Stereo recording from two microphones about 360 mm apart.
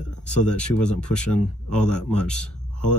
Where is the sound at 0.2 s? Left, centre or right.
Centre.